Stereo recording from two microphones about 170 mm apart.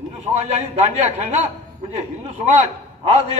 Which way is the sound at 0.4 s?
40° right (ahead or behind).